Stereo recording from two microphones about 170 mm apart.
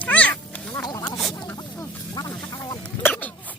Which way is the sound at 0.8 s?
20° left (ahead or behind).